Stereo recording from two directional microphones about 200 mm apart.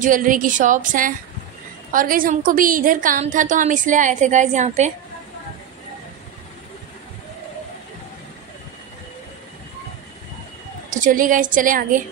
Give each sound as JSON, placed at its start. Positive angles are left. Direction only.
{"t": 0.0, "sound": "a woman's voice", "side_deg": -40}
{"t": 10.9, "sound": "a woman's voice", "side_deg": -40}